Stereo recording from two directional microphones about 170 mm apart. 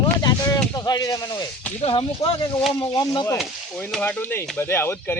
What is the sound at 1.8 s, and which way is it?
A man's voice, 35° left (ahead or behind).